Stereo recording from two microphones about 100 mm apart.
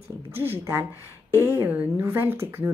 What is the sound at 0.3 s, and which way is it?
A woman's voice, 20° right (ahead or behind).